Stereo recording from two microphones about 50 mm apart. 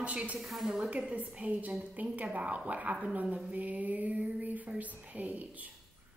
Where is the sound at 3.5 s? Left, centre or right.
Right.